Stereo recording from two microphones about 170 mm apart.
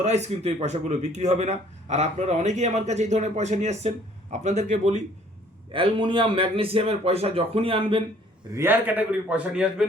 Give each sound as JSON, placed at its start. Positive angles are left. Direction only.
{"t": 0.0, "sound": "speech", "side_deg": -40}
{"t": 5.7, "sound": "a man's voice", "side_deg": -30}
{"t": 8.5, "sound": "a man's voice", "side_deg": -10}